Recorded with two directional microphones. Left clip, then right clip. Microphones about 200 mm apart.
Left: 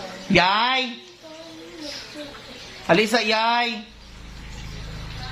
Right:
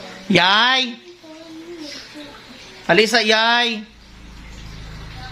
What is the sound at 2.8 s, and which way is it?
Speech, 40° right (ahead or behind).